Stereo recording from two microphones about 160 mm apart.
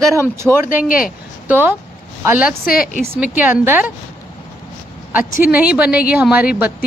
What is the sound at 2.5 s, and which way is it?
Speech, 65° left (ahead or behind).